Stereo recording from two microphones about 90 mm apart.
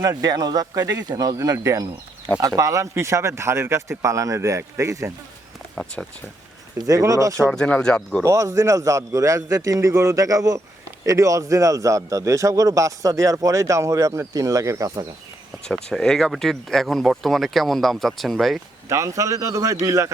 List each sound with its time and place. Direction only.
0.0 s a man's voice: 40° right (ahead or behind)
5.7 s speech: 10° left (ahead or behind)
6.7 s a man's voice: 40° right (ahead or behind)
7.5 s speech: 10° left (ahead or behind)
8.2 s a man's voice: 35° right (ahead or behind)
15.6 s speech: 5° left (ahead or behind)
18.9 s a man's voice: 35° right (ahead or behind)